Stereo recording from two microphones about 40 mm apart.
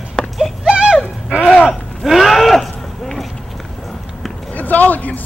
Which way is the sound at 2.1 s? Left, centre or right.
Centre.